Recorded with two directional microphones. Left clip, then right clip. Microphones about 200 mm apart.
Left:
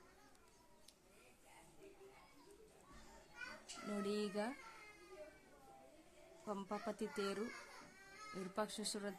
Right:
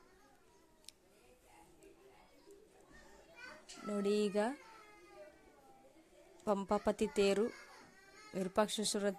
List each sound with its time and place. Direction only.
3.9 s speech: 30° right (ahead or behind)
6.4 s speech: 35° right (ahead or behind)